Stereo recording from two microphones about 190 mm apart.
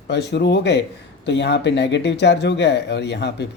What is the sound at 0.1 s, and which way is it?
Speech, 65° left (ahead or behind).